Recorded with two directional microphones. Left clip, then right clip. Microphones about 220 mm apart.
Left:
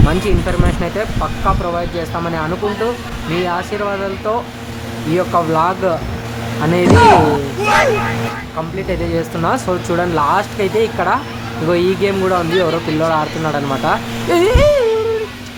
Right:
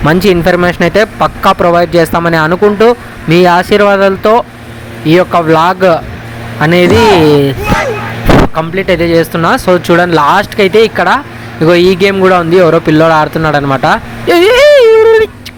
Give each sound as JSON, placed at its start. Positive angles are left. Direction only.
{"t": 0.1, "sound": "speech", "side_deg": -35}
{"t": 6.8, "sound": "speech", "side_deg": 0}
{"t": 8.5, "sound": "speech", "side_deg": -25}